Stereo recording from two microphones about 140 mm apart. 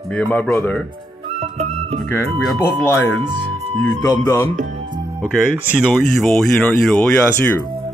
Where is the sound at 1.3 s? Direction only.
50° right (ahead or behind).